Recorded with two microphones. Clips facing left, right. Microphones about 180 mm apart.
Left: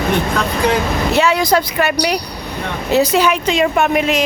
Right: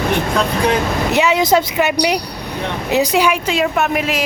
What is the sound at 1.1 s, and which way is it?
Speech, 20° right (ahead or behind).